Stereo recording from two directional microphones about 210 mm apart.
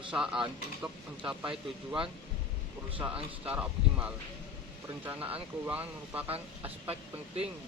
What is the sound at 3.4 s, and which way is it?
Speech, 5° right (ahead or behind).